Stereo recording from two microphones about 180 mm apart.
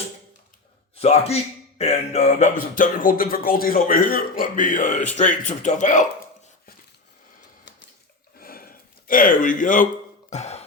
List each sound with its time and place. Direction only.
0.9 s a man's voice: 35° left (ahead or behind)
1.8 s music: 40° left (ahead or behind)
2.6 s speech: 50° left (ahead or behind)
8.4 s a sound: 55° left (ahead or behind)